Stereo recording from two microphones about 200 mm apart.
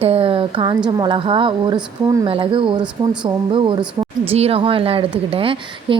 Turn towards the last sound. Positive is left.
turn(degrees=-25)  # may be behind; listen again after turning